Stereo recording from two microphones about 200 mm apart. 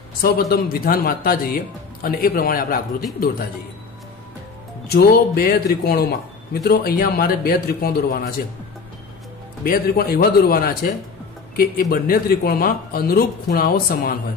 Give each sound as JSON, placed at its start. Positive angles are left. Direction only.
{"t": 0.2, "sound": "speech", "side_deg": 50}
{"t": 4.9, "sound": "speech", "side_deg": 50}
{"t": 9.7, "sound": "speech", "side_deg": 50}